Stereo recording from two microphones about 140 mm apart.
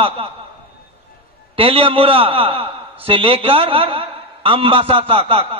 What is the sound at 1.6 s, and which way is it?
A man's voice, 40° right (ahead or behind).